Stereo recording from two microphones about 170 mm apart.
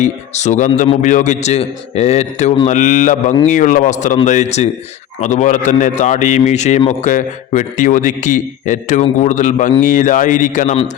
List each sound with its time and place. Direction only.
0.0 s a man's voice: 45° left (ahead or behind)